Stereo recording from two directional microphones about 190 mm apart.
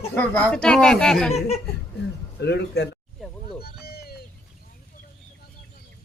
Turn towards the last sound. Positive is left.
turn(degrees=55)  # may be behind; listen again after turning